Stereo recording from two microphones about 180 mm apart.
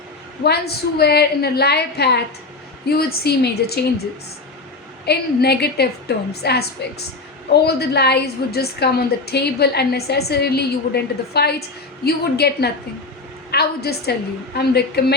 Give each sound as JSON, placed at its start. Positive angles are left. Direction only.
{"t": 0.4, "sound": "a woman's voice", "side_deg": 65}
{"t": 5.0, "sound": "a woman's voice", "side_deg": 65}